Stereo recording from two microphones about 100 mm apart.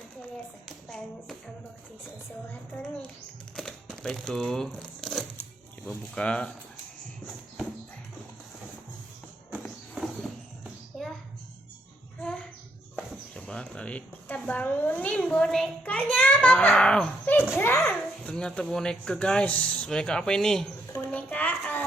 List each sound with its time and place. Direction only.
0.2 s clapping: 5° left (ahead or behind)
2.8 s speech: 10° left (ahead or behind)
9.9 s a sound: centre (ahead or behind)
10.9 s music: centre (ahead or behind)
13.3 s speech: 10° left (ahead or behind)
17.6 s a child's voice: 20° left (ahead or behind)
17.8 s speech: 10° left (ahead or behind)